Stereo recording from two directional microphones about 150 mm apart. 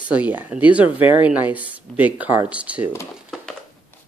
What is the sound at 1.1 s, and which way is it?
Speech, 10° right (ahead or behind).